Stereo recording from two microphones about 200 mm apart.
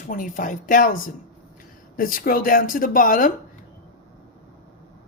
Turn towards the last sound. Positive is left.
turn(degrees=40)  # may be behind; listen again after turning